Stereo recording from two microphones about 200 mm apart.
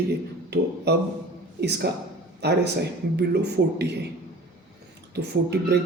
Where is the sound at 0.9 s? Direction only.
55° right (ahead or behind).